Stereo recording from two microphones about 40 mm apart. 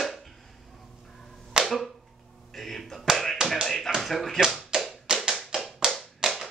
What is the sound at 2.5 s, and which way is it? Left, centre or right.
Music, centre.